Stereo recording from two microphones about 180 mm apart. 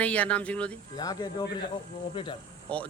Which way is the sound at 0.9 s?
20° left (ahead or behind).